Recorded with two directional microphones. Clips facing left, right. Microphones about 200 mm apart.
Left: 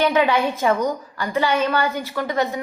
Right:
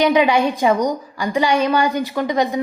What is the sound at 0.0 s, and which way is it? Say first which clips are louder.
A woman's voice: right 3 dB; 15° right (ahead or behind).